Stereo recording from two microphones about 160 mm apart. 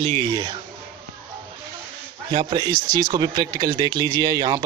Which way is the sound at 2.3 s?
30° right (ahead or behind).